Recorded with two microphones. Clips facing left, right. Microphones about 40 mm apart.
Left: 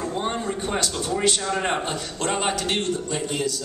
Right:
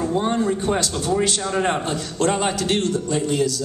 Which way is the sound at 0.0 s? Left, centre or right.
Centre.